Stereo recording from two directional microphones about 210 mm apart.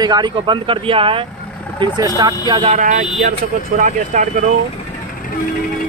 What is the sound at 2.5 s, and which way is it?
Speech, 30° right (ahead or behind).